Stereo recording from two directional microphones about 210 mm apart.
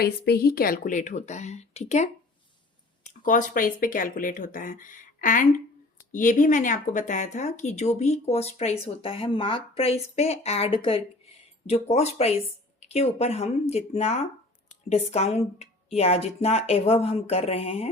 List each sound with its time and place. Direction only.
0.0 s speech: 50° left (ahead or behind); by 17.8 s 30° left (ahead or behind)